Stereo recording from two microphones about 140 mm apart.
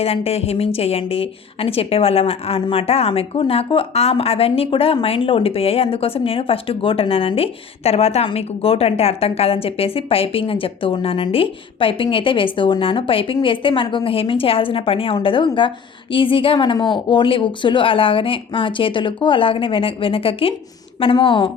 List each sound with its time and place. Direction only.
0.0 s a woman's voice: 45° left (ahead or behind)